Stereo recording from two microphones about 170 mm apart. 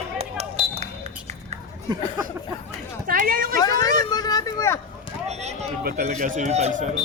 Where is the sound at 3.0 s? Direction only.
55° right (ahead or behind).